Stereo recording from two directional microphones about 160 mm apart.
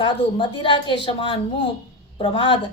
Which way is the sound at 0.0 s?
30° left (ahead or behind).